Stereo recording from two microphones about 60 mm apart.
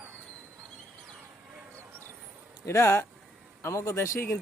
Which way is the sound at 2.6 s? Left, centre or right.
Left.